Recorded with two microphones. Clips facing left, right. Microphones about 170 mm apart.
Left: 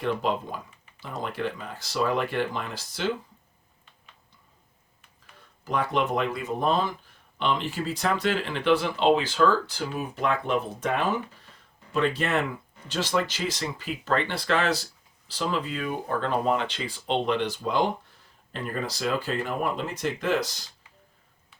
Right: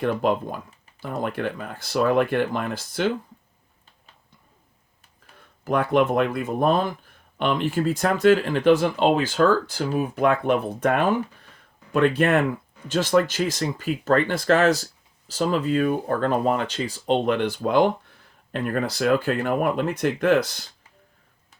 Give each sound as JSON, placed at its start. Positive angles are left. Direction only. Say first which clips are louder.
{"t": 0.0, "sound": "speech", "louder": "right 5 dB", "side_deg": -50}
{"t": 5.6, "sound": "speech", "louder": "right 6 dB", "side_deg": -55}